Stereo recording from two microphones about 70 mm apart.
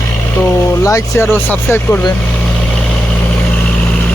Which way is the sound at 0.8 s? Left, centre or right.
Left.